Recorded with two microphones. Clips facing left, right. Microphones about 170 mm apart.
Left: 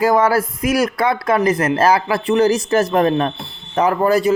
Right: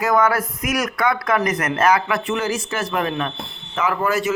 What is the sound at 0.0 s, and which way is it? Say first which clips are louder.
A man's voice: left 4 dB; 30° left (ahead or behind).